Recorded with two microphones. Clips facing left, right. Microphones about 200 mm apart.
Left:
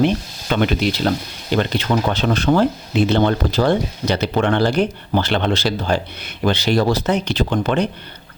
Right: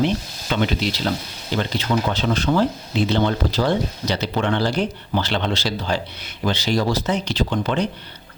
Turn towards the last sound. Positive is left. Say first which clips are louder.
# left 3 dB
turn(degrees=55)  # may be behind; listen again after turning